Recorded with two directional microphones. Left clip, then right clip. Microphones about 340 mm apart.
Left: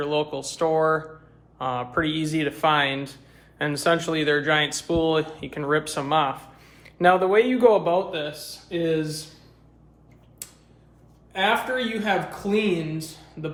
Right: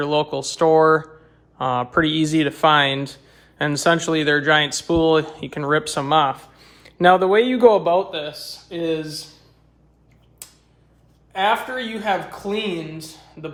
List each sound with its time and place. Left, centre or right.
0.0 s speech: right
11.3 s speech: centre